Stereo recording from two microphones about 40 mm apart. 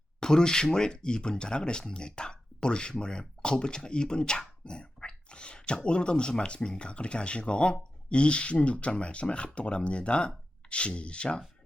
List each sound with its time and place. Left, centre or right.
0.2 s speech: centre